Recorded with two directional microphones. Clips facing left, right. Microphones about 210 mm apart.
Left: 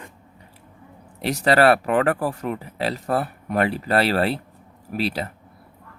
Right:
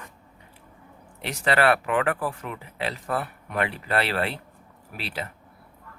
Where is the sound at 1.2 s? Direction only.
40° left (ahead or behind).